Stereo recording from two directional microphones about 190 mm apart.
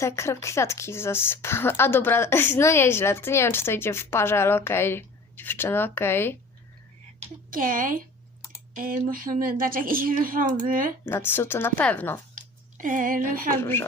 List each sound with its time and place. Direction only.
0.0 s speech: 15° left (ahead or behind)
7.5 s a woman's voice: 45° right (ahead or behind)
11.0 s speech: 10° left (ahead or behind)
12.7 s a woman's voice: 45° right (ahead or behind)
13.6 s speech: 10° left (ahead or behind)